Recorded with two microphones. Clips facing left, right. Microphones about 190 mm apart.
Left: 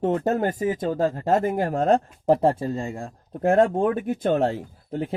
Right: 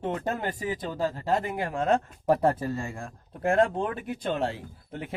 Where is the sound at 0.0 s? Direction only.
45° left (ahead or behind).